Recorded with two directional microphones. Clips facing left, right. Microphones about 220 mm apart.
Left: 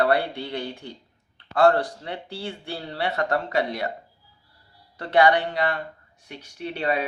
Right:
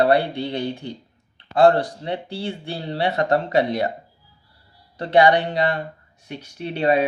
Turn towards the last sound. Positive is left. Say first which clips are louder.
# right 6 dB
turn(degrees=-25)  # may be behind; listen again after turning